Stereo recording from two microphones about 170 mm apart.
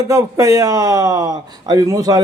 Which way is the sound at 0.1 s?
20° right (ahead or behind).